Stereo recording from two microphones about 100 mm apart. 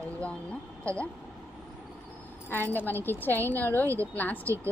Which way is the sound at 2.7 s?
20° left (ahead or behind).